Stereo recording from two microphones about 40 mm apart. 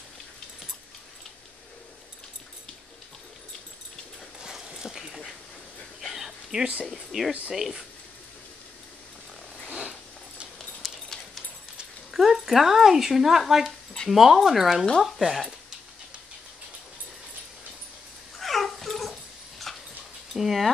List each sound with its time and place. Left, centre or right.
4.4 s dog: centre
5.9 s a sound: centre
7.1 s speech: centre
9.7 s a sound: centre
10.8 s clip-clop: centre
12.1 s speech: centre
18.4 s dog: centre
20.3 s speech: centre